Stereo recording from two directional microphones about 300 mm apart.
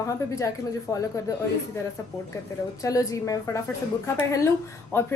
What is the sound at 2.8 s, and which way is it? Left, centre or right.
Speech, centre.